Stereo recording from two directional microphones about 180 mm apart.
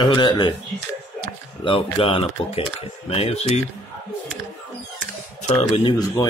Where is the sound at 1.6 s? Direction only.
30° left (ahead or behind).